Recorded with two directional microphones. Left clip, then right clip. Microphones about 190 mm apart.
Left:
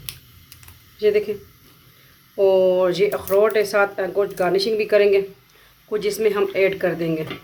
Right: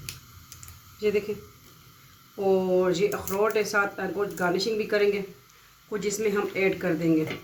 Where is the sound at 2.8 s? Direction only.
60° left (ahead or behind).